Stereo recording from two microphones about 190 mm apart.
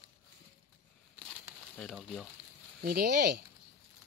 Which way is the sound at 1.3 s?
5° left (ahead or behind).